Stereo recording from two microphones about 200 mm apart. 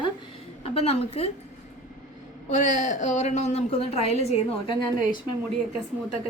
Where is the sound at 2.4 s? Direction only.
35° left (ahead or behind).